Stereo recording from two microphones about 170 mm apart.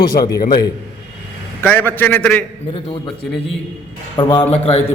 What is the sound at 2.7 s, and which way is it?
Speech, 30° left (ahead or behind).